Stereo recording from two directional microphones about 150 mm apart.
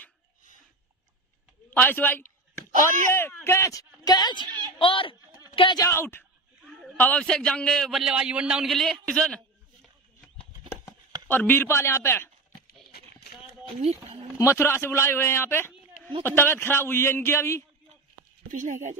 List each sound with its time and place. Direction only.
1.7 s a sound: 10° left (ahead or behind)
3.1 s a man's voice: 15° left (ahead or behind)
4.5 s a woman's voice: 30° right (ahead or behind)
4.7 s speech: 35° left (ahead or behind)
5.9 s a man's voice: 15° left (ahead or behind)
14.4 s a man's voice: 15° left (ahead or behind)
18.5 s speech: 55° right (ahead or behind)